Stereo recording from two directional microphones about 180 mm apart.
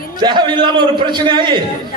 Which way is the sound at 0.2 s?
25° right (ahead or behind).